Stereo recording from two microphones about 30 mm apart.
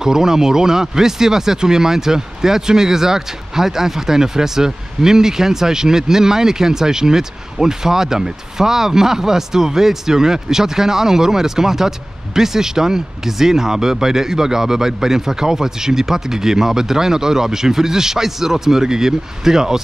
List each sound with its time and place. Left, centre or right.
0.0 s speech: centre